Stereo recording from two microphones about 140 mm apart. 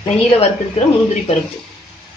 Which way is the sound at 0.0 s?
50° left (ahead or behind).